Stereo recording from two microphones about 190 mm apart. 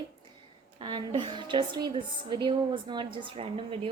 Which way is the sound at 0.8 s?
25° right (ahead or behind).